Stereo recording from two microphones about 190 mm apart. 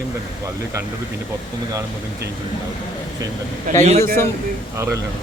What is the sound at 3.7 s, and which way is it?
Speech, 45° right (ahead or behind).